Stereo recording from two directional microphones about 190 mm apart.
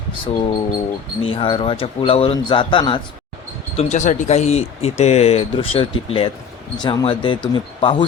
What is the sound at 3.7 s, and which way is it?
Speech, 35° left (ahead or behind).